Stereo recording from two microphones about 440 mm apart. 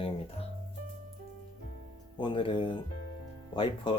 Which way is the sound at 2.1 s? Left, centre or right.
Centre.